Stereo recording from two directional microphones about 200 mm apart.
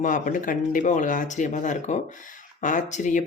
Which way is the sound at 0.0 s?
40° left (ahead or behind).